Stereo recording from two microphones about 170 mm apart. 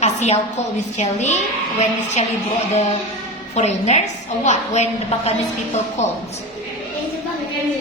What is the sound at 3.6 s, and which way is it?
A woman's voice, 40° left (ahead or behind).